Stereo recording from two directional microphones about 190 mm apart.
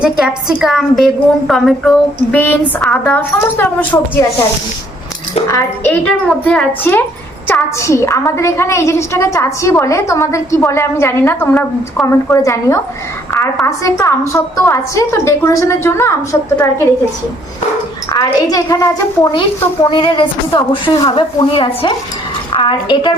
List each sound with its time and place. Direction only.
0.0 s a woman's voice: 5° right (ahead or behind)
5.5 s a woman's voice: 10° left (ahead or behind)
18.1 s a child's voice: 20° left (ahead or behind)